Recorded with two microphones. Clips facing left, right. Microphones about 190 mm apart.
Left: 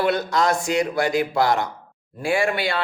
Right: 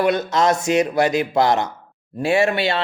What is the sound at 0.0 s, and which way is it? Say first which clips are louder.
Speech: right 3 dB; 20° right (ahead or behind).